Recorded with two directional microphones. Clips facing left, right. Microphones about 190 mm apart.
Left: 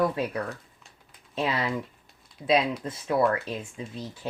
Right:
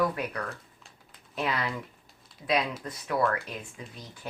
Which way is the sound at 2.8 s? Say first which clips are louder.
Left 4 dB; 25° left (ahead or behind).